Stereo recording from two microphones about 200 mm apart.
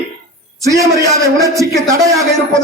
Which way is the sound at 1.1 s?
15° right (ahead or behind).